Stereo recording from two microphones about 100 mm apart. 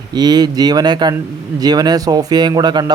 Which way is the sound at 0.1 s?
45° right (ahead or behind).